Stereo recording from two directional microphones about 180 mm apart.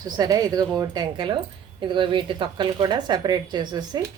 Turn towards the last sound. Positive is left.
turn(degrees=-25)  # may be behind; listen again after turning